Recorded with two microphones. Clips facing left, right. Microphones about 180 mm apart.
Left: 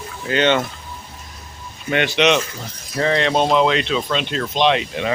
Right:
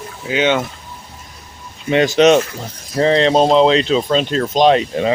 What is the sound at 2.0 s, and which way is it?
Speech, 40° right (ahead or behind).